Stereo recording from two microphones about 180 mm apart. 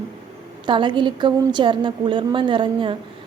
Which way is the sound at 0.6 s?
25° right (ahead or behind).